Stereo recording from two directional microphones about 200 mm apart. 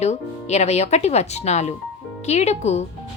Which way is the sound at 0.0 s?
35° left (ahead or behind).